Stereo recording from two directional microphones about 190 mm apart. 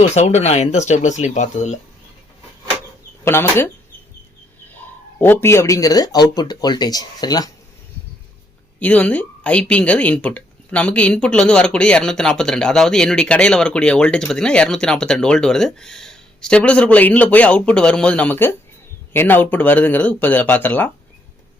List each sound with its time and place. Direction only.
0.0 s speech: 35° left (ahead or behind)
3.2 s speech: 10° left (ahead or behind)
5.2 s speech: 10° left (ahead or behind)
8.8 s a woman's voice: 10° left (ahead or behind)